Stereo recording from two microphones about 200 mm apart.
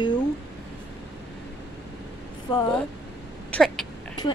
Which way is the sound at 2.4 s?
20° left (ahead or behind).